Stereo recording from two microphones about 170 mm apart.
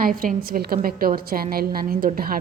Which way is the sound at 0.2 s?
55° right (ahead or behind).